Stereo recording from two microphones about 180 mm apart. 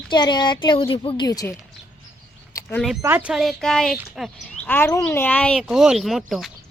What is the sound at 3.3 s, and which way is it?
Speech, centre (ahead or behind).